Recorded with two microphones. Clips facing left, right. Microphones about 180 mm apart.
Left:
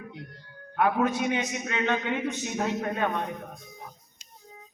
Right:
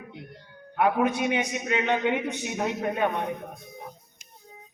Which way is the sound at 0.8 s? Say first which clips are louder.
Right 1 dB; 20° right (ahead or behind).